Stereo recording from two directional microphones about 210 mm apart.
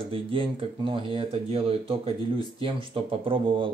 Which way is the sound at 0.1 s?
25° right (ahead or behind).